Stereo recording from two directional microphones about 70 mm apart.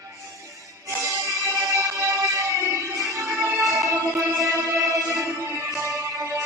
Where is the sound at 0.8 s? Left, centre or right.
Right.